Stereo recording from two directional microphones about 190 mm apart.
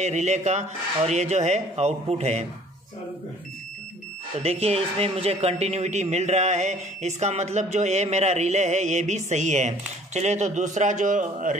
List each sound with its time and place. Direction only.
0.0 s speech: 35° right (ahead or behind)
4.4 s speech: 30° right (ahead or behind)